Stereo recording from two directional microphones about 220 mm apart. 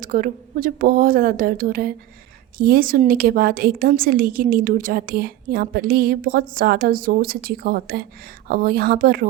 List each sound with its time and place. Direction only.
0.0 s a woman's voice: 40° right (ahead or behind)